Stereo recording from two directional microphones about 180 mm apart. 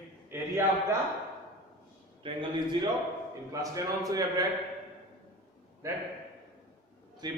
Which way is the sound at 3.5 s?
20° right (ahead or behind).